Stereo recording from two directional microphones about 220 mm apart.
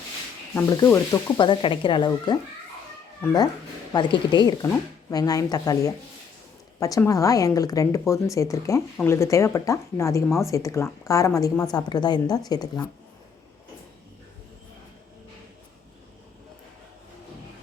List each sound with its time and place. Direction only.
0.5 s speech: 15° left (ahead or behind)